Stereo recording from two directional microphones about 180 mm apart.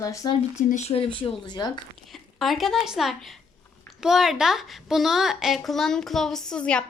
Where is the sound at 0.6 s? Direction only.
40° left (ahead or behind); by 1.7 s 25° left (ahead or behind).